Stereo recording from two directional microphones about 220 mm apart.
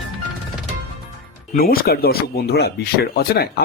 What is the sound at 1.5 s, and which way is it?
Speech, 40° left (ahead or behind).